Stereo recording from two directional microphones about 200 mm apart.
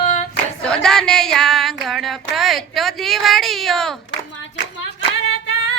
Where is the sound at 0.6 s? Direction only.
5° left (ahead or behind).